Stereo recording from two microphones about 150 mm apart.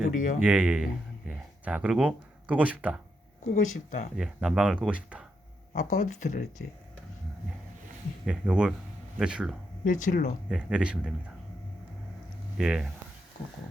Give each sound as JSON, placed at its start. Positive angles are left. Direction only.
{"t": 0.2, "sound": "speech", "side_deg": 55}
{"t": 0.4, "sound": "speech", "side_deg": -10}
{"t": 3.5, "sound": "speech", "side_deg": 55}
{"t": 4.2, "sound": "speech", "side_deg": -5}
{"t": 5.7, "sound": "speech", "side_deg": 55}
{"t": 8.3, "sound": "speech", "side_deg": -5}
{"t": 9.8, "sound": "speech", "side_deg": 60}
{"t": 10.5, "sound": "speech", "side_deg": -5}
{"t": 12.5, "sound": "speech", "side_deg": -5}